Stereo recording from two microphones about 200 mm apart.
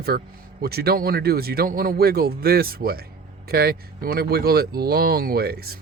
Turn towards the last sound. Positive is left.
turn(degrees=-50)  # may be behind; listen again after turning